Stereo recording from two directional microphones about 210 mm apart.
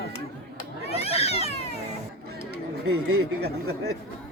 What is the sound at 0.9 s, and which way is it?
Cat, 30° left (ahead or behind).